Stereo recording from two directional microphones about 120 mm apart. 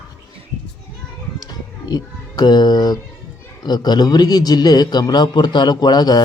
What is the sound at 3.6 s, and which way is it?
A man's voice, 35° left (ahead or behind).